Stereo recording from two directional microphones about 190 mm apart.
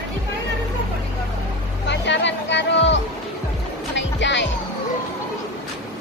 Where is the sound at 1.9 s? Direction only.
70° left (ahead or behind).